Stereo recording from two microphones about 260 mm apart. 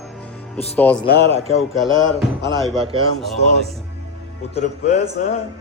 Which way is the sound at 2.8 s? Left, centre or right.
Right.